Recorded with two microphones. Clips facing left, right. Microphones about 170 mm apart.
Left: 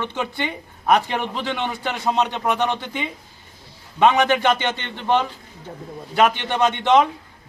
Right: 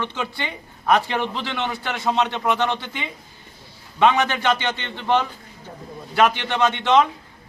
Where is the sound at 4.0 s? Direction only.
15° left (ahead or behind).